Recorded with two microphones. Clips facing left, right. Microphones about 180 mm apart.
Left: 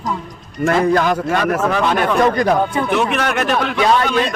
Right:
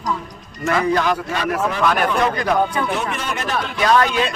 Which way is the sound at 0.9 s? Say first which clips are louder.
Left 4 dB; 45° left (ahead or behind).